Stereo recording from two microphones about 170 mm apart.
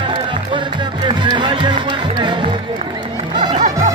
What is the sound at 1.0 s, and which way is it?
Music, 25° right (ahead or behind).